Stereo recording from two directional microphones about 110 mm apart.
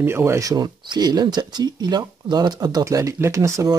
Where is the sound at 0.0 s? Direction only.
20° right (ahead or behind).